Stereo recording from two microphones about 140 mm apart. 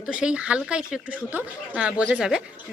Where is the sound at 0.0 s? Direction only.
5° right (ahead or behind).